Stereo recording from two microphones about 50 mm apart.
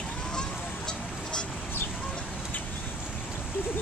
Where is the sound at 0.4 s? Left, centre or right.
Centre.